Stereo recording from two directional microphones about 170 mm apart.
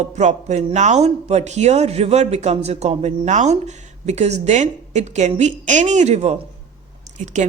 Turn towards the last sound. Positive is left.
turn(degrees=-45)  # may be behind; listen again after turning